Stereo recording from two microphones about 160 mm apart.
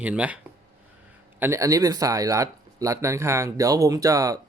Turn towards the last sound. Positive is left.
turn(degrees=-20)  # may be behind; listen again after turning